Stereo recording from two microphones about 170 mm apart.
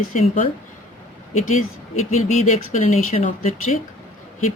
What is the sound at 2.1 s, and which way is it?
Speech, 40° left (ahead or behind).